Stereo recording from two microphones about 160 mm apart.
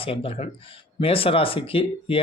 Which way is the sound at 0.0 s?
35° left (ahead or behind).